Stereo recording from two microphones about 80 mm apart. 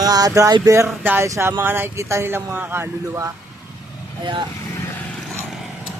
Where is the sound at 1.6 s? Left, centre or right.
Right.